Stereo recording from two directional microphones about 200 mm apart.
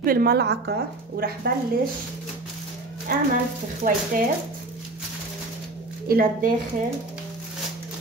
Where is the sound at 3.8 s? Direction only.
45° right (ahead or behind).